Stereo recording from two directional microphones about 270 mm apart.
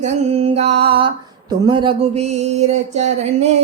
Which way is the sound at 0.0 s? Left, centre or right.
Right.